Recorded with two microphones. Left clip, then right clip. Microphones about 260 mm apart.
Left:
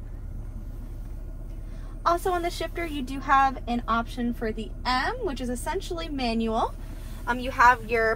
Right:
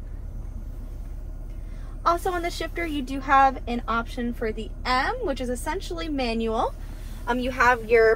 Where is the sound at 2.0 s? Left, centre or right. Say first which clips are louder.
Right 1 dB; left.